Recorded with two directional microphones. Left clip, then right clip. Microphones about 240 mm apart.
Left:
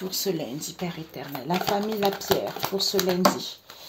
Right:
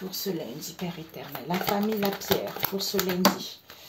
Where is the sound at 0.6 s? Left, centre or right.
Left.